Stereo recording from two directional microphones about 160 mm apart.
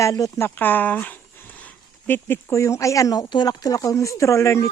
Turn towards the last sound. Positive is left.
turn(degrees=15)  # may be behind; listen again after turning